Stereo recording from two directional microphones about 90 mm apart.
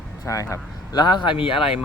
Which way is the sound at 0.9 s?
55° left (ahead or behind).